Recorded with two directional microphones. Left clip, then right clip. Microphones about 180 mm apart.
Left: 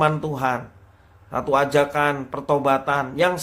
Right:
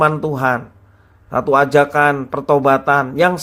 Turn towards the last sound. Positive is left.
turn(degrees=-30)  # may be behind; listen again after turning